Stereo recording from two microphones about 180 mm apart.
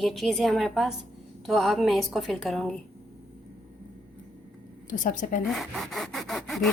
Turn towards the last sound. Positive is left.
turn(degrees=0)  # may be behind; listen again after turning